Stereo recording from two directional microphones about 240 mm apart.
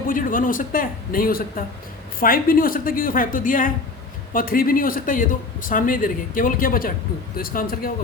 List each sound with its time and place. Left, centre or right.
0.1 s a man's voice: left